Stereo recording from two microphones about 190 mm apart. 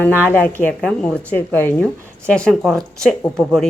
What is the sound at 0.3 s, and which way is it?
A woman's voice, 10° left (ahead or behind).